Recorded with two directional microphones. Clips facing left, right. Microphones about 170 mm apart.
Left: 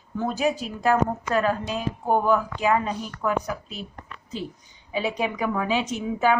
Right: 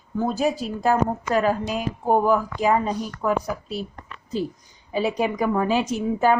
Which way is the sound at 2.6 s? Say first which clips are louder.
Right 2 dB; 35° right (ahead or behind).